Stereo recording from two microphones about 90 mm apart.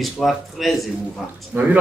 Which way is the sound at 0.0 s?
Centre (ahead or behind).